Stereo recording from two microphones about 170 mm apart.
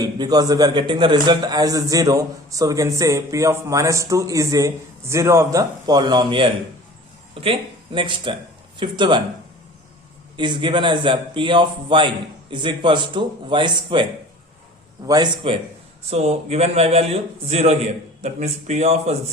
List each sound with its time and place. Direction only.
0.0 s a man's voice: 20° right (ahead or behind)
7.9 s a man's voice: 30° right (ahead or behind)
10.3 s a man's voice: 25° right (ahead or behind)
16.0 s a man's voice: 40° right (ahead or behind)